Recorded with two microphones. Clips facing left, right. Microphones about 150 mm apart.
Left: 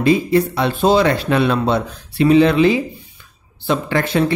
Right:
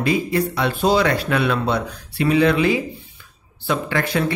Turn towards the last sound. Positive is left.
turn(degrees=30)  # may be behind; listen again after turning